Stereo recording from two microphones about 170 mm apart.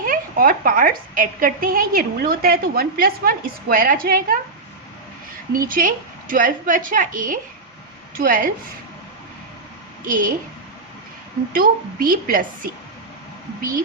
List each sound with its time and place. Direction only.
0.0 s a woman's voice: 55° right (ahead or behind)
5.5 s a woman's voice: 55° right (ahead or behind)
10.0 s a woman's voice: 50° right (ahead or behind)
11.5 s a woman's voice: 55° right (ahead or behind)